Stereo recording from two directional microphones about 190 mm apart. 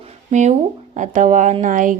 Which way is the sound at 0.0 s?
35° right (ahead or behind).